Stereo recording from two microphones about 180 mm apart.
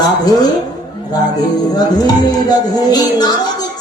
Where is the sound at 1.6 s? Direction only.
20° left (ahead or behind).